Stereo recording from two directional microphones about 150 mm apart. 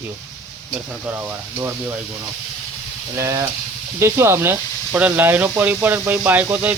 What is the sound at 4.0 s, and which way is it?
Speech, 15° right (ahead or behind).